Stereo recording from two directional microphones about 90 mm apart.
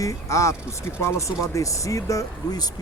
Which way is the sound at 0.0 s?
35° left (ahead or behind).